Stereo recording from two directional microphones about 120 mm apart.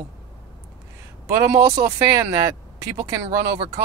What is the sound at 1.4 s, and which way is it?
Speech, 30° right (ahead or behind).